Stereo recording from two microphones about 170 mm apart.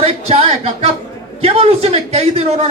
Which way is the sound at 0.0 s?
35° right (ahead or behind).